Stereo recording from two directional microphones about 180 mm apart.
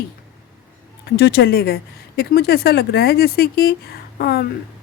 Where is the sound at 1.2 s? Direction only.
65° left (ahead or behind).